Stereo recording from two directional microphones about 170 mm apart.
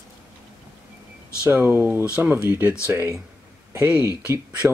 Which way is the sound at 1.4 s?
10° right (ahead or behind).